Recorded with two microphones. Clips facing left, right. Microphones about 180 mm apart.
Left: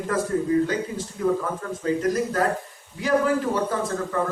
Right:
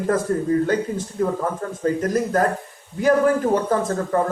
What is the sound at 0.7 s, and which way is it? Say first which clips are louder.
Speech: right 5 dB; 50° right (ahead or behind).